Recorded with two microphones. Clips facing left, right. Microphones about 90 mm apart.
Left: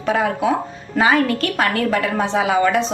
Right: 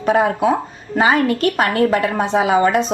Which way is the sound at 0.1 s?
40° right (ahead or behind).